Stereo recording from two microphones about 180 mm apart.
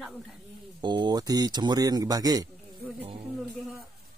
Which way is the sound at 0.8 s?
25° right (ahead or behind).